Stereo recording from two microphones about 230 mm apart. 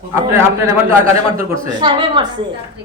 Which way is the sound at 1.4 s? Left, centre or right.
Right.